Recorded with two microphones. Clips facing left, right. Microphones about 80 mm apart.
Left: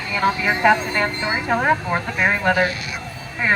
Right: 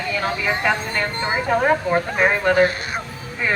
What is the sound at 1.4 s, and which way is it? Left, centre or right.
Speech, centre.